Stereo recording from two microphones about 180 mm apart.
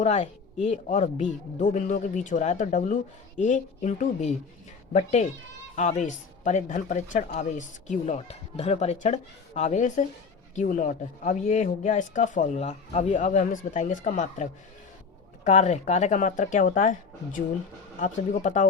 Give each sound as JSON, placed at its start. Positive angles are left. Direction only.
{"t": 0.0, "sound": "speech", "side_deg": 40}
{"t": 15.4, "sound": "speech", "side_deg": 40}